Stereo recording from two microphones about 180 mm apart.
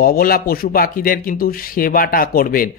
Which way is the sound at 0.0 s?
55° left (ahead or behind).